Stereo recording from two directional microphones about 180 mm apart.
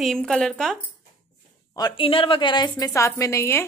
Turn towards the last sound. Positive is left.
turn(degrees=15)  # may be behind; listen again after turning